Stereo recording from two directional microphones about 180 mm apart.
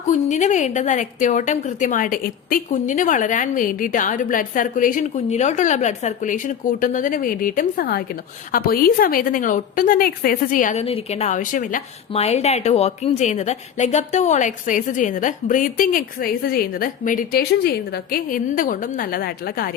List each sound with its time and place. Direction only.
0.1 s a woman's voice: 40° left (ahead or behind)
12.1 s a woman's voice: 35° left (ahead or behind); by 19.7 s 55° left (ahead or behind)